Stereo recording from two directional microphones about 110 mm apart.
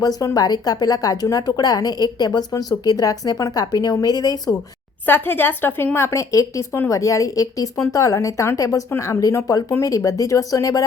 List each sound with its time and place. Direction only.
0.0 s speech: 35° left (ahead or behind)
5.0 s speech: 20° left (ahead or behind)